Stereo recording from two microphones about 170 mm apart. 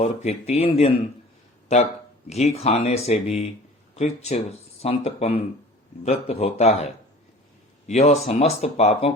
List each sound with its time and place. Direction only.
0.0 s speech: 40° left (ahead or behind)
2.3 s speech: 40° left (ahead or behind)
7.9 s speech: 40° left (ahead or behind)